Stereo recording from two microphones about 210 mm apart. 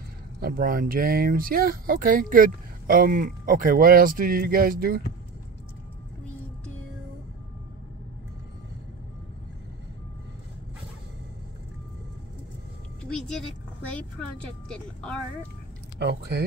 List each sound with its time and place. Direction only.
0.4 s speech: 45° right (ahead or behind)
13.8 s speech: 5° left (ahead or behind)
16.0 s speech: 50° right (ahead or behind)